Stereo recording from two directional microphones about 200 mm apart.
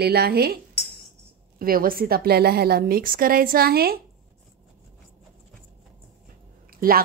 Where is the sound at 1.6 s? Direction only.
45° right (ahead or behind).